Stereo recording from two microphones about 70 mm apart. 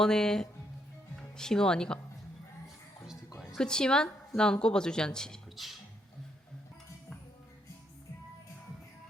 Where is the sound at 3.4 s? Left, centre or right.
Centre.